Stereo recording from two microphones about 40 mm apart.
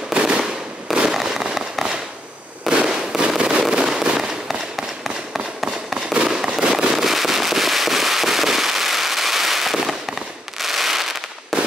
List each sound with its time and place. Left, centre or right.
0.1 s fireworks: centre
3.3 s fireworks: right; by 5.9 s centre
6.2 s fireworks: centre
6.9 s firecracker: centre
10.6 s fireworks: centre
11.5 s firecracker: centre